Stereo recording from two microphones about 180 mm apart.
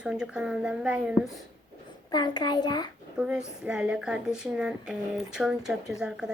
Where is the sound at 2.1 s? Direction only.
25° left (ahead or behind).